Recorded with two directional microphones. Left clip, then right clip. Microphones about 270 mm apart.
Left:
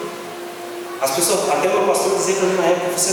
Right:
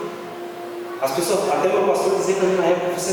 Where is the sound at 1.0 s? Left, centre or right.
Centre.